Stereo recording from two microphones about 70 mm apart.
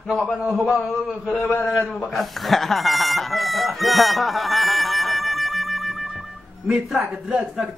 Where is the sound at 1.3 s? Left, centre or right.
Left.